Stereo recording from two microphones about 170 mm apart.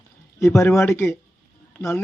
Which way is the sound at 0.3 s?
15° left (ahead or behind).